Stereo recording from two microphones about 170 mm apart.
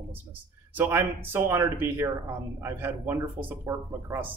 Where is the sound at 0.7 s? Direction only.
10° right (ahead or behind).